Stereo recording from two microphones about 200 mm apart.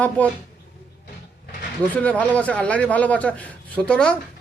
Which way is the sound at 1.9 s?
5° left (ahead or behind).